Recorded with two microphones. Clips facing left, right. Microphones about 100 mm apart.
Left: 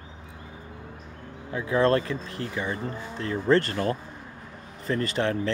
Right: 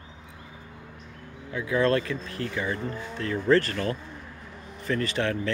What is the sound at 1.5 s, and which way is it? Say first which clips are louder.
A man's voice: left 2 dB; 30° left (ahead or behind).